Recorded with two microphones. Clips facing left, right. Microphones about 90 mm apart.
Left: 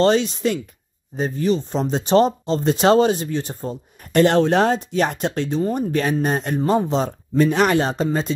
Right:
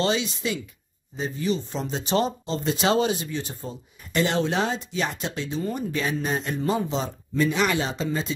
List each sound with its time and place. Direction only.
0.0 s speech: 45° left (ahead or behind)